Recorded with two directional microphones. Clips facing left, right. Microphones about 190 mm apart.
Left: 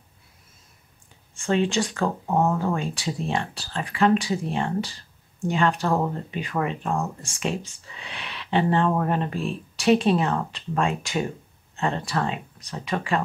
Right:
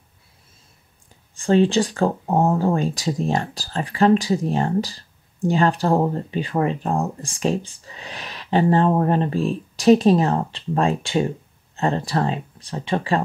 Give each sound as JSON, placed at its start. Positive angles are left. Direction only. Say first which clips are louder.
{"t": 1.3, "sound": "speech", "louder": "right 6 dB", "side_deg": -35}